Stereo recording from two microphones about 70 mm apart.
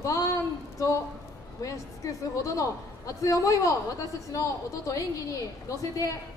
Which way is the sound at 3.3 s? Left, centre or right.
Left.